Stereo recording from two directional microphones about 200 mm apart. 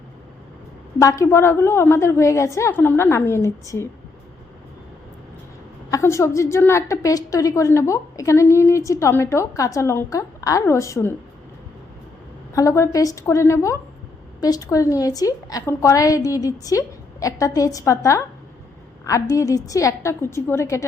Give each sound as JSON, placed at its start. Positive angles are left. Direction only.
{"t": 0.9, "sound": "a woman's voice", "side_deg": 15}
{"t": 5.9, "sound": "a woman's voice", "side_deg": 15}
{"t": 12.5, "sound": "a woman's voice", "side_deg": 15}